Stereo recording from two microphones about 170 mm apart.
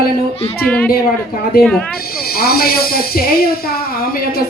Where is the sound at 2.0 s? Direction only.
60° left (ahead or behind).